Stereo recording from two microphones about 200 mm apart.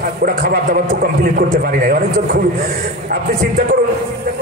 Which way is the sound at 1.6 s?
45° right (ahead or behind).